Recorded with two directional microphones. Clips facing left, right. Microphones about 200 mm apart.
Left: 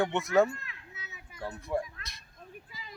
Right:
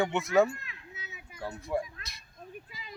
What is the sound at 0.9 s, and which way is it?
Children playing, 20° right (ahead or behind).